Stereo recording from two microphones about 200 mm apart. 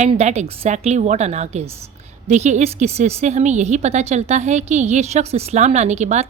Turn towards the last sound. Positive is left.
turn(degrees=-35)  # may be behind; listen again after turning